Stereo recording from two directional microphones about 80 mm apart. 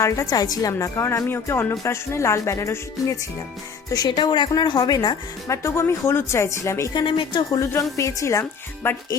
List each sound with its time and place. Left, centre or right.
0.0 s a woman's voice: left
0.7 s speech: left
3.9 s speech: left
5.6 s speech: left
6.9 s speech: left
7.6 s speech: left